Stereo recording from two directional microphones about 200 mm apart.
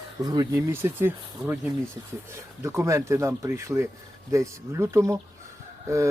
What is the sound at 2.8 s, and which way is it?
Speech, 15° right (ahead or behind).